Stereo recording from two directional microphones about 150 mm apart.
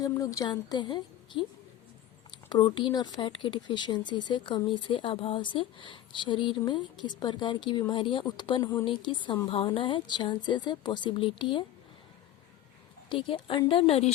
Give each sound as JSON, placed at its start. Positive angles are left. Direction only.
{"t": 0.0, "sound": "a woman's voice", "side_deg": 20}
{"t": 2.5, "sound": "speech", "side_deg": 30}
{"t": 13.1, "sound": "speech", "side_deg": 35}